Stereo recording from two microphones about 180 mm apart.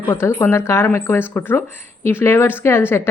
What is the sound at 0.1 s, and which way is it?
A woman's voice, 15° left (ahead or behind).